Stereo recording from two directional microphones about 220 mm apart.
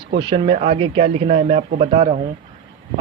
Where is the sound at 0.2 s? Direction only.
25° right (ahead or behind).